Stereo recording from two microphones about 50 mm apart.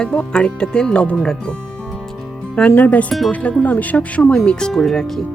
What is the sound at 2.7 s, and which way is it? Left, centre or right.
Speech, left.